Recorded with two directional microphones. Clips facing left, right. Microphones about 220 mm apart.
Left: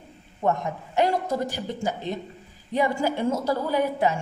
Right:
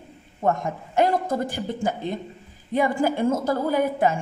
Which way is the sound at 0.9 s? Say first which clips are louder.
Right 2 dB; 50° right (ahead or behind).